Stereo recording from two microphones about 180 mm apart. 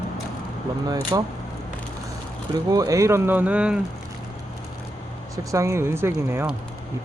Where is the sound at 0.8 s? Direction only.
20° right (ahead or behind).